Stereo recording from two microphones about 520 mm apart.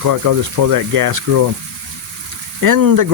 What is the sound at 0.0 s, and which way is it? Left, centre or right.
Speech, right.